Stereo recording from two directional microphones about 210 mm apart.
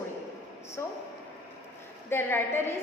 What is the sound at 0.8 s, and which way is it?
Speech, 10° left (ahead or behind).